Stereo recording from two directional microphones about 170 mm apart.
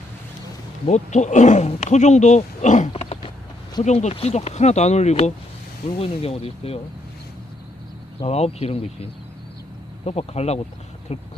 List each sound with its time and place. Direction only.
0.9 s speech: 45° left (ahead or behind)
2.9 s a sound: 35° left (ahead or behind)
3.8 s speech: 40° left (ahead or behind)
8.2 s speech: 35° left (ahead or behind)
10.1 s speech: 40° left (ahead or behind)